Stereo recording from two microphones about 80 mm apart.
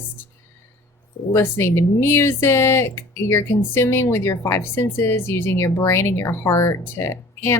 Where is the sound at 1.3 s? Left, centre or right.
Left.